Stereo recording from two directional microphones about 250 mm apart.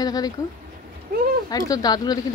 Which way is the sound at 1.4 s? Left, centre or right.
Centre.